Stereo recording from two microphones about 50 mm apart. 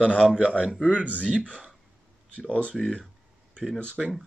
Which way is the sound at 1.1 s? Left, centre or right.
Right.